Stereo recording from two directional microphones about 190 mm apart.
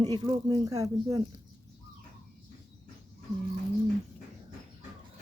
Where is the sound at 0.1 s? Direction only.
20° right (ahead or behind).